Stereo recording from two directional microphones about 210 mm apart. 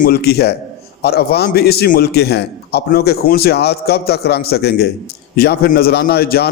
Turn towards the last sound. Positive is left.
turn(degrees=50)  # may be behind; listen again after turning